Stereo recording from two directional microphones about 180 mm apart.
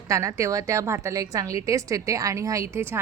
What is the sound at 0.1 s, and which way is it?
A woman's voice, 15° right (ahead or behind).